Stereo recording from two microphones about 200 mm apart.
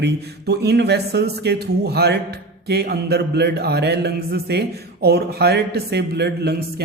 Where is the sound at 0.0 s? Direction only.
55° right (ahead or behind).